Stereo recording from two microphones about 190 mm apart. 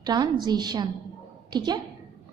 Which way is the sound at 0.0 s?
20° right (ahead or behind).